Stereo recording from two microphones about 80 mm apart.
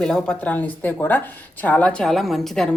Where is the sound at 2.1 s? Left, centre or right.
Centre.